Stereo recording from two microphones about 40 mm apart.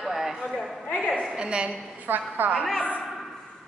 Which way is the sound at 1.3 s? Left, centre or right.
Right.